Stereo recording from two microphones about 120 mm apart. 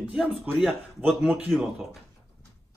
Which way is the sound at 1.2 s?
15° right (ahead or behind).